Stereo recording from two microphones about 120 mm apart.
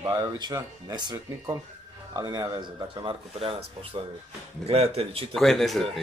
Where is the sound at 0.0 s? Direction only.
30° right (ahead or behind).